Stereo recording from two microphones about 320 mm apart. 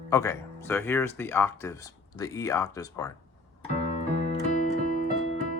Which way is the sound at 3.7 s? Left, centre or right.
Left.